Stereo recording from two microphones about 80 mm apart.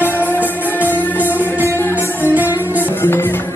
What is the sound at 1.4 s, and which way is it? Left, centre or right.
Music, right.